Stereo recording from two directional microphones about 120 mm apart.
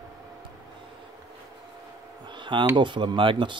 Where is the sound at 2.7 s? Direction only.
40° right (ahead or behind).